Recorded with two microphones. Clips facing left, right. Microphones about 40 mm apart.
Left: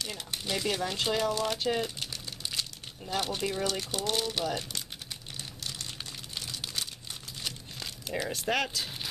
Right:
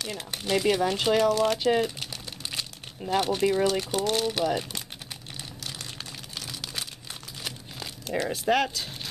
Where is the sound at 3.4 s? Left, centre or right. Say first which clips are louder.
Right 8 dB; centre.